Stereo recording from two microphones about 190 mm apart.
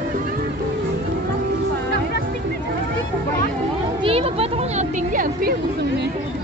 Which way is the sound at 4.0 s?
30° right (ahead or behind).